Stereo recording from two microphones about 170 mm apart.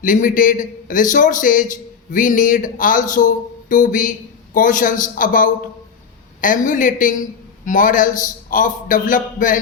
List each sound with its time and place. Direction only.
0.0 s a man's voice: 50° left (ahead or behind)